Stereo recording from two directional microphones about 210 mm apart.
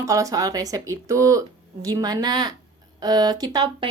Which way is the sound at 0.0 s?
15° right (ahead or behind).